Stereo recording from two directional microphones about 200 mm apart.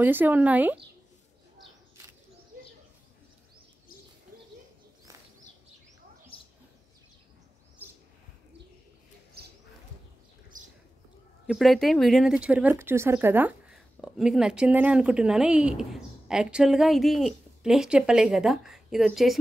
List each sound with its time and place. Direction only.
0.0 s speech: 10° right (ahead or behind)
6.3 s a sound: 25° left (ahead or behind)
11.4 s speech: centre (ahead or behind)